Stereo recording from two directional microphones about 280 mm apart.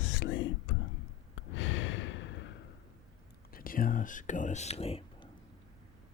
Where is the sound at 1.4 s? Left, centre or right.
Left.